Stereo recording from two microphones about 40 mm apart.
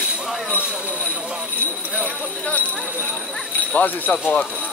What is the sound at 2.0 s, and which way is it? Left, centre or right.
Speech, left.